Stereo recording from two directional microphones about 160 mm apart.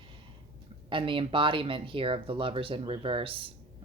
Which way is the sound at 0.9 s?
30° right (ahead or behind).